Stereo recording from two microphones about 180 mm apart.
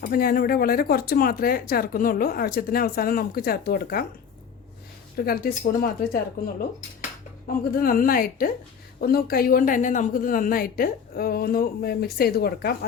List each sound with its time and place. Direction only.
0.0 s speech: 55° left (ahead or behind)
5.1 s speech: 55° left (ahead or behind)
7.4 s a woman's voice: 50° left (ahead or behind)